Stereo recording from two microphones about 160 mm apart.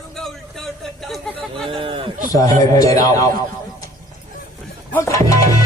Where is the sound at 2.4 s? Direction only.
20° left (ahead or behind).